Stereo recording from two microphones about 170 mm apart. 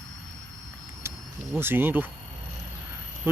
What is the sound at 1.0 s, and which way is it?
Cricket, 15° right (ahead or behind).